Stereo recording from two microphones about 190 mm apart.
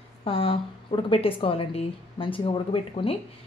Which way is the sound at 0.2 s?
30° left (ahead or behind).